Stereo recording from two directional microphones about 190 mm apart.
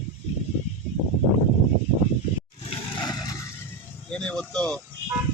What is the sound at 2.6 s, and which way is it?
Roar, 25° left (ahead or behind).